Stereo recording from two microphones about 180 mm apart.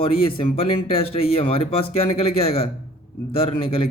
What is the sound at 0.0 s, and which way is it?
A man's voice, 30° left (ahead or behind).